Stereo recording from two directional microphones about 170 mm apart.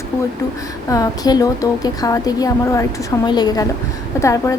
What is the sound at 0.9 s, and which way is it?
A woman's voice, 20° left (ahead or behind).